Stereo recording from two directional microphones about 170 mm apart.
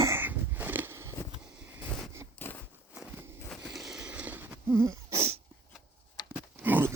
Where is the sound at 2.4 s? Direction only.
10° left (ahead or behind).